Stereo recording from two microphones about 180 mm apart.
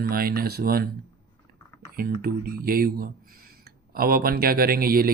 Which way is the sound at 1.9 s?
55° right (ahead or behind).